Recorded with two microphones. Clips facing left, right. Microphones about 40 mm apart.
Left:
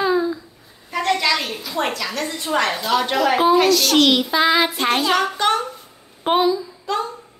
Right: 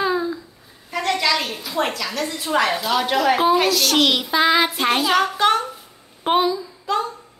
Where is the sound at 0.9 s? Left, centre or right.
Centre.